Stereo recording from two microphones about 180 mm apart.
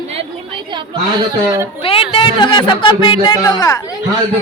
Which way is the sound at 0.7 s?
20° right (ahead or behind).